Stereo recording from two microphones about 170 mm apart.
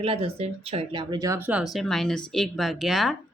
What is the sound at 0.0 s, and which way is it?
A woman's voice, 35° right (ahead or behind).